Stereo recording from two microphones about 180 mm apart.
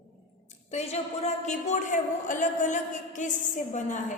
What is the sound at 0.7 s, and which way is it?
A man's voice, 35° left (ahead or behind).